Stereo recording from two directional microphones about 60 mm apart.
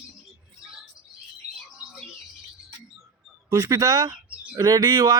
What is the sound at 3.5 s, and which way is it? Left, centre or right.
Speech, right.